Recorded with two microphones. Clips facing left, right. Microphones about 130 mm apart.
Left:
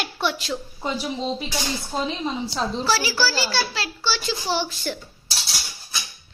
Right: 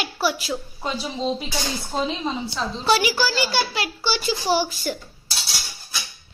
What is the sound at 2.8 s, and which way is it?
A woman's voice, 20° right (ahead or behind).